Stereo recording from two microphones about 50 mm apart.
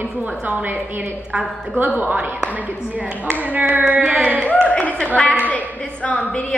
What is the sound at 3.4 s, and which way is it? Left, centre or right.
A woman's voice, right.